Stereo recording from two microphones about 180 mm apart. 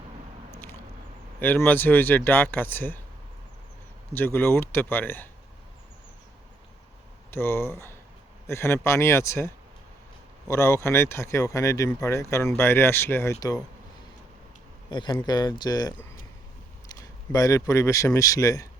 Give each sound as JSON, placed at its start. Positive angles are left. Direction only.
{"t": 1.4, "sound": "speech", "side_deg": 10}
{"t": 4.1, "sound": "speech", "side_deg": 10}
{"t": 7.3, "sound": "speech", "side_deg": 15}
{"t": 10.5, "sound": "speech", "side_deg": 15}
{"t": 14.8, "sound": "speech", "side_deg": 25}